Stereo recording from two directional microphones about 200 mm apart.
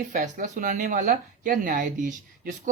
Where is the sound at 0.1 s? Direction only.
40° right (ahead or behind).